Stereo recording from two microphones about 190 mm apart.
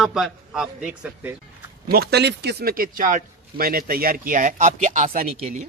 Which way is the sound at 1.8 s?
55° right (ahead or behind).